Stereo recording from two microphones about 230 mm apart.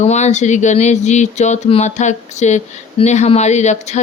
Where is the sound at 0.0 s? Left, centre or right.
Left.